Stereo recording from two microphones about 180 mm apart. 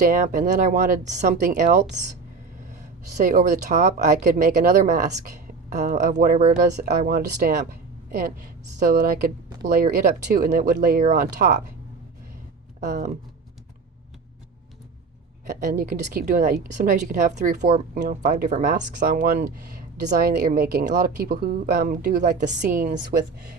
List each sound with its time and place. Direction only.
0.0 s speech: 45° right (ahead or behind)
3.3 s speech: 45° right (ahead or behind)
9.6 s speech: 45° right (ahead or behind)
12.8 s speech: 45° right (ahead or behind)
15.6 s speech: 50° right (ahead or behind)